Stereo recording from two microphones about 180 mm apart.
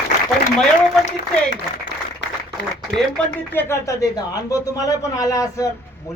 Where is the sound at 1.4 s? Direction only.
80° left.